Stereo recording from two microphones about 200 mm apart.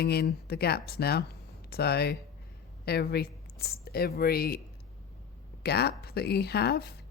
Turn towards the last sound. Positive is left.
turn(degrees=55)  # may be behind; listen again after turning